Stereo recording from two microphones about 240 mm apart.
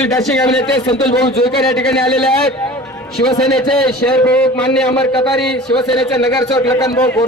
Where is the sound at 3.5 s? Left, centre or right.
Centre.